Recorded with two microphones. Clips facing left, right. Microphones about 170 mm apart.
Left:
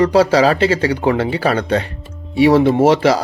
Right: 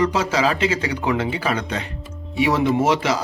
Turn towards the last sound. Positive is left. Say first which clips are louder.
# left 7 dB
turn(degrees=35)  # may be behind; listen again after turning